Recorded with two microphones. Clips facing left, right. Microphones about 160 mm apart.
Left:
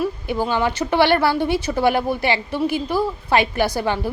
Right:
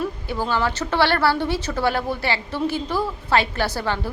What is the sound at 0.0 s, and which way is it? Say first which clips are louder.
A woman's voice: left 4 dB; 15° left (ahead or behind).